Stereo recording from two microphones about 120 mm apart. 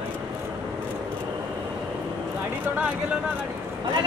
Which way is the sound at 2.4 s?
15° right (ahead or behind).